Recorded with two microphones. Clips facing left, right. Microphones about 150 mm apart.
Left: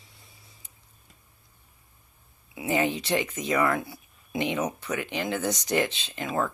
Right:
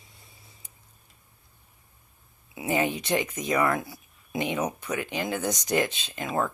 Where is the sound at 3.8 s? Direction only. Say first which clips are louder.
Left 1 dB; 20° left (ahead or behind).